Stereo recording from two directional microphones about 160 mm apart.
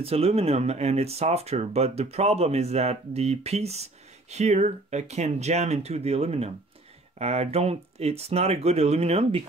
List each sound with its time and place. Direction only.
0.0 s speech: 40° right (ahead or behind)